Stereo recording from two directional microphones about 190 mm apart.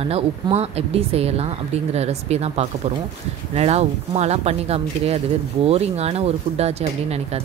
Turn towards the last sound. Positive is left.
turn(degrees=-35)  # may be behind; listen again after turning